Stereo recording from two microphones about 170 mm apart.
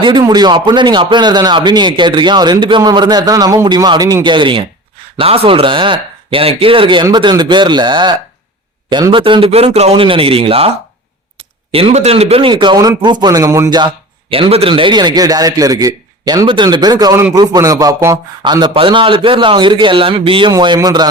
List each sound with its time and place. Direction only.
0.0 s a man's voice: 25° right (ahead or behind)
11.7 s a man's voice: 35° right (ahead or behind)